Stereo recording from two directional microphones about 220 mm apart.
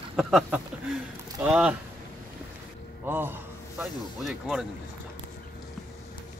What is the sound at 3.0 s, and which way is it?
A man's voice, 10° right (ahead or behind).